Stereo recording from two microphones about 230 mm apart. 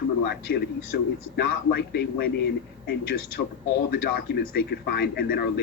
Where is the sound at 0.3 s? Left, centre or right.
Left.